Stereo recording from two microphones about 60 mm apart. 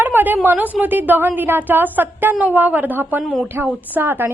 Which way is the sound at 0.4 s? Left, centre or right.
Right.